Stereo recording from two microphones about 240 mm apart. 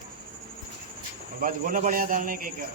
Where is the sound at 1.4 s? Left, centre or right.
Right.